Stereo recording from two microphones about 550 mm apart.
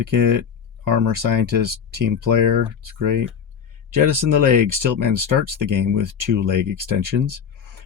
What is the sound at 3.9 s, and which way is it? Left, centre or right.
Speech, right.